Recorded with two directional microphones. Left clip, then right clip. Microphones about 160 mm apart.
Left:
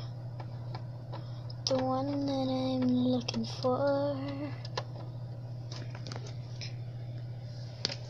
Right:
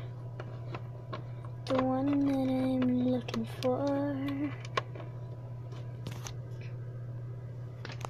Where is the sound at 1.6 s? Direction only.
Centre (ahead or behind).